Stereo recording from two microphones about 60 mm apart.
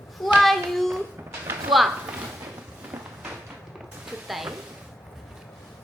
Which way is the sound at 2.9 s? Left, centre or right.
Right.